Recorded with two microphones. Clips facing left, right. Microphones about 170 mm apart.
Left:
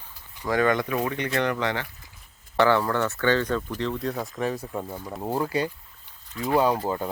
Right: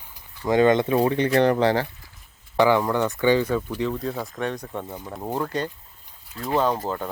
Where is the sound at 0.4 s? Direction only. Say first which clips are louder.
Right 5 dB; 25° right (ahead or behind).